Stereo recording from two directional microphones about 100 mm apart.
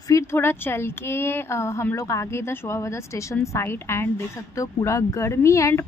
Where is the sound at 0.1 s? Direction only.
25° left (ahead or behind).